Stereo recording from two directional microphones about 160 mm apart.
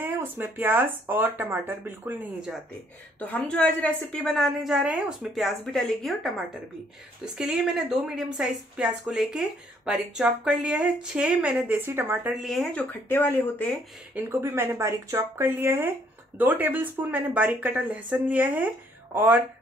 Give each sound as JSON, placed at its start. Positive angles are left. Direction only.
{"t": 0.0, "sound": "speech", "side_deg": -10}
{"t": 3.2, "sound": "speech", "side_deg": 10}
{"t": 12.4, "sound": "speech", "side_deg": 0}
{"t": 14.1, "sound": "speech", "side_deg": -15}